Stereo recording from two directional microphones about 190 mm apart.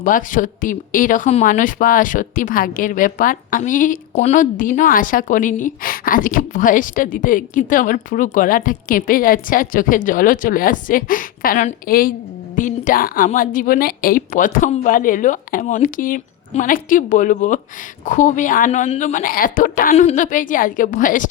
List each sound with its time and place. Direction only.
0.0 s speech: 45° left (ahead or behind)